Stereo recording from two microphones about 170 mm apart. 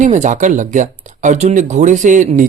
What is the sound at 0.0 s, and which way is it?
Speech, 45° right (ahead or behind).